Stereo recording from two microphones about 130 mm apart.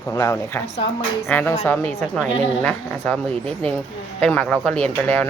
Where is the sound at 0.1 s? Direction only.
25° left (ahead or behind).